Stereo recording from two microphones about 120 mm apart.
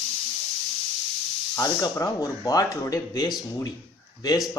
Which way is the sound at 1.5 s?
25° left (ahead or behind).